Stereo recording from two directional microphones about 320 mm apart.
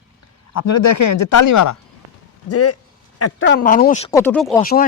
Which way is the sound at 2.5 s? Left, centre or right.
Left.